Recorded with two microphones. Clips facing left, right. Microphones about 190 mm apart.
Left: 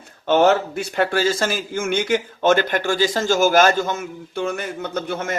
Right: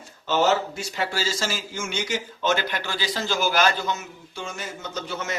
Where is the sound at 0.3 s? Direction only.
55° left (ahead or behind).